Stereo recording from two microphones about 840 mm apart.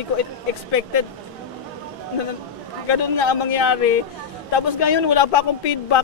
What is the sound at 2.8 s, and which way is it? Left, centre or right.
A man's voice, left.